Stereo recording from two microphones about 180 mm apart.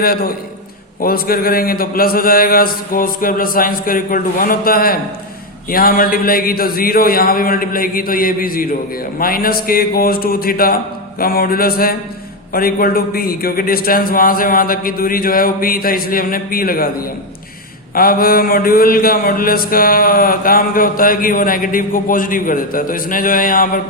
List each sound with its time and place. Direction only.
0.0 s a man's voice: 55° left (ahead or behind)
1.0 s mantra: 55° left (ahead or behind)
9.1 s a man's voice: 55° left (ahead or behind)
12.5 s mantra: 55° left (ahead or behind)
17.9 s mantra: 55° left (ahead or behind)